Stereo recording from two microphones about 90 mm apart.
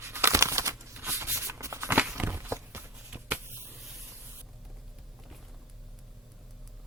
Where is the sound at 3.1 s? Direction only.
20° right (ahead or behind).